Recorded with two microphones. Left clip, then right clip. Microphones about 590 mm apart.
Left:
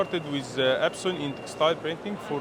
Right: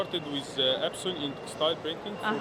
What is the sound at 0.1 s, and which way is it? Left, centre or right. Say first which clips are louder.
Mantra: left 3 dB; left.